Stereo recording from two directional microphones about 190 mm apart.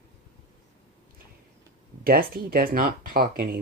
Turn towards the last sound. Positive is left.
turn(degrees=-50)  # may be behind; listen again after turning